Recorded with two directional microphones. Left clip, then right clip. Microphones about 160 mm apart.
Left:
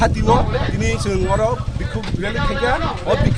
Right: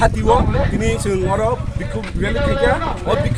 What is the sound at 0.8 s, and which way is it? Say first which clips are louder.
Speech: right 1 dB; 30° right (ahead or behind).